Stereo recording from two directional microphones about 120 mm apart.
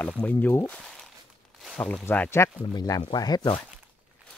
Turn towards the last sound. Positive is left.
turn(degrees=40)  # may be behind; listen again after turning